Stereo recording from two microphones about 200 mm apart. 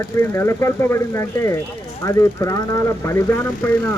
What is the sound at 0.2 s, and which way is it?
A man's voice, 15° left (ahead or behind).